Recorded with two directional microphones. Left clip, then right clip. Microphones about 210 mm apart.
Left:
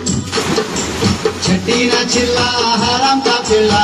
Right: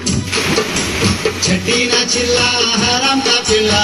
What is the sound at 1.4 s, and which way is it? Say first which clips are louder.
Music: even; 50° left (ahead or behind).